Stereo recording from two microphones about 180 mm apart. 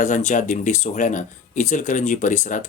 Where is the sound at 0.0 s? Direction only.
45° left (ahead or behind).